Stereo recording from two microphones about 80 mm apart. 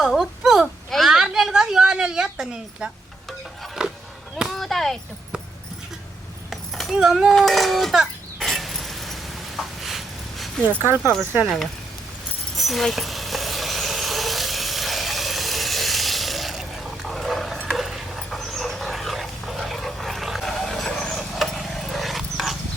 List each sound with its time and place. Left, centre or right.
0.0 s whimper: centre
0.9 s a sound: centre
4.4 s speech: centre
6.5 s a sound: centre
6.9 s speech: centre
7.3 s a sound: centre
10.7 s speech: right
12.5 s vehicle: centre
17.7 s dog: centre